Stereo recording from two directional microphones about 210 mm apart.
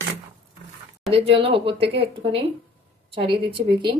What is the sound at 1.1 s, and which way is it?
Speech, 25° right (ahead or behind).